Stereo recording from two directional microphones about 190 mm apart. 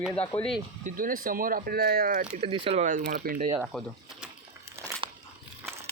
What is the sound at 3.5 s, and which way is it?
Speech, 5° right (ahead or behind).